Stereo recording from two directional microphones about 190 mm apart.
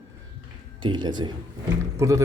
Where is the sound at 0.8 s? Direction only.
25° right (ahead or behind).